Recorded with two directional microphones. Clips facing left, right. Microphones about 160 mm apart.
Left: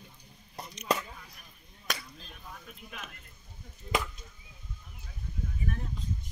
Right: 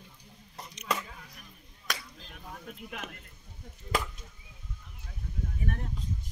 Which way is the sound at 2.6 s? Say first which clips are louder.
Right 5 dB; 65° right (ahead or behind).